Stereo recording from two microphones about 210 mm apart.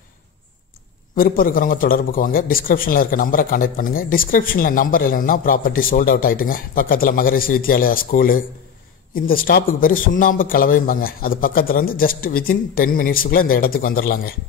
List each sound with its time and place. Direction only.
1.1 s a man's voice: 45° left (ahead or behind)